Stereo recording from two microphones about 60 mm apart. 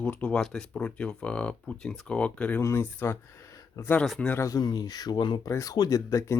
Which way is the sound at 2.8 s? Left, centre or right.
Left.